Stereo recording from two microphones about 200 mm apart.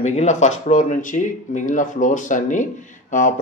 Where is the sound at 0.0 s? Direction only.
35° left (ahead or behind).